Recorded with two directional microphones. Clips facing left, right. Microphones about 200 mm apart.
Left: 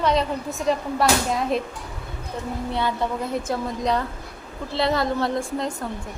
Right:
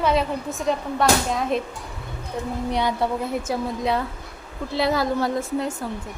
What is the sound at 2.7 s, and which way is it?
A woman's voice, 15° right (ahead or behind).